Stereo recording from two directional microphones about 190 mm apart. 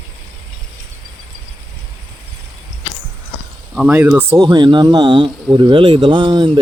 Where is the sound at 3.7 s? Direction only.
5° right (ahead or behind).